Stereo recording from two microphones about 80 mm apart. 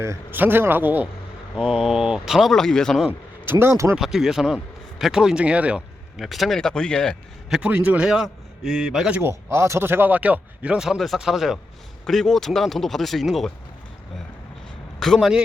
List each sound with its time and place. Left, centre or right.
0.0 s a man's voice: right
1.5 s speech: centre
3.1 s speech: right
3.9 s speech: centre
6.1 s speech: centre
7.7 s speech: centre
9.2 s speech: right; by 10.8 s centre
10.8 s speech: centre
14.9 s speech: centre